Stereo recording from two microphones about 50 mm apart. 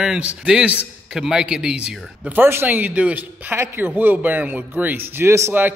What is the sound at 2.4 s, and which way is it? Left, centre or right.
Speech, right.